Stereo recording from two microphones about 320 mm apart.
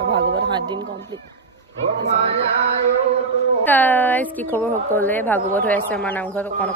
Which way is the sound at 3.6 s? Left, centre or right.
Centre.